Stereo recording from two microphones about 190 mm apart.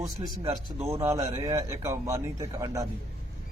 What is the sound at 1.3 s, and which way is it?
A man's voice, 15° right (ahead or behind).